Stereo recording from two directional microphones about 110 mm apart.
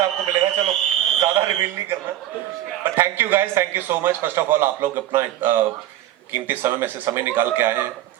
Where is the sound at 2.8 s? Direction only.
20° right (ahead or behind).